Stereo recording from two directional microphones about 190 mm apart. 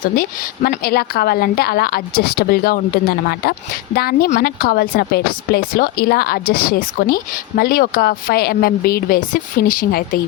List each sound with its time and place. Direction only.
0.0 s a woman's voice: 50° left (ahead or behind)